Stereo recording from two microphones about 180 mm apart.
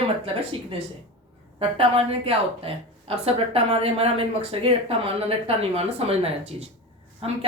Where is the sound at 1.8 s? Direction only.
30° right (ahead or behind).